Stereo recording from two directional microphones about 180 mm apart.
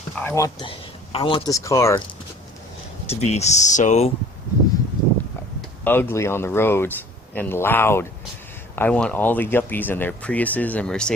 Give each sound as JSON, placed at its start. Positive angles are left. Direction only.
{"t": 0.2, "sound": "speech", "side_deg": 15}
{"t": 0.7, "sound": "speech", "side_deg": 30}
{"t": 3.1, "sound": "speech", "side_deg": 35}
{"t": 5.8, "sound": "speech", "side_deg": 10}